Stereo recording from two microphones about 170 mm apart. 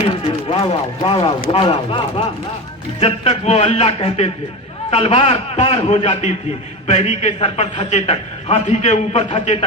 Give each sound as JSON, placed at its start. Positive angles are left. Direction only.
{"t": 0.3, "sound": "a man's voice", "side_deg": 35}